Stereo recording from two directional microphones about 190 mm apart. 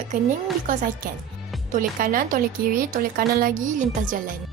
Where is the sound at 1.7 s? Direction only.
45° right (ahead or behind).